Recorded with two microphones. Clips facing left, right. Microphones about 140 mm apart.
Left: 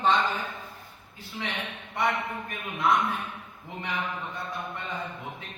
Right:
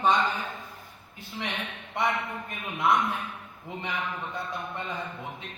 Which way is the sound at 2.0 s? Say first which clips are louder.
Even; 20° right (ahead or behind).